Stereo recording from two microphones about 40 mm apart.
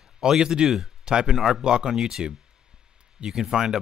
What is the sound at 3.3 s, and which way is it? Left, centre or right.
Speech, centre.